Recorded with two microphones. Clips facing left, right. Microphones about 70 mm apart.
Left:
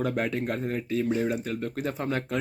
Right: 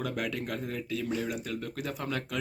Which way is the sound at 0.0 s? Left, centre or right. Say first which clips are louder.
Left 6 dB; left.